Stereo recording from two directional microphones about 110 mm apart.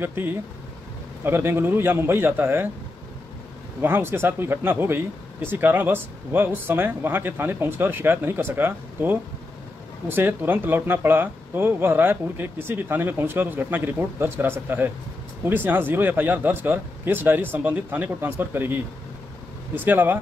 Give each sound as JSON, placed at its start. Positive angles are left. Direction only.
{"t": 0.0, "sound": "speech", "side_deg": -20}
{"t": 3.8, "sound": "speech", "side_deg": -20}